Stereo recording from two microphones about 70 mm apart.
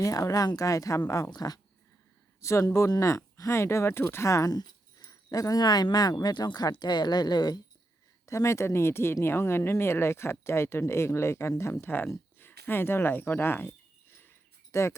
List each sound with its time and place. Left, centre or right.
0.0 s speech: left
1.3 s speech: left
2.4 s speech: left
4.5 s speech: left
8.3 s speech: left
11.9 s speech: left
14.7 s speech: left